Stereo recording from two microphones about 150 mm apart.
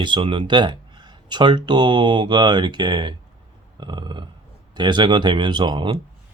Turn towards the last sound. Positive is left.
turn(degrees=-30)  # may be behind; listen again after turning